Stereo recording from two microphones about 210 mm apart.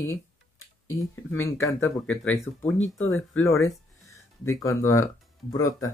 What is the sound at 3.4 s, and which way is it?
Speech, 15° left (ahead or behind).